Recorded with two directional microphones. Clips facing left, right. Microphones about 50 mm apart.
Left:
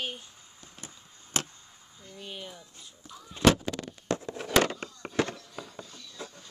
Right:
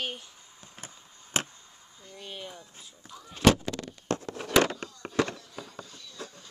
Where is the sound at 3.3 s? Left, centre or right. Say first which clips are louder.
Even; centre.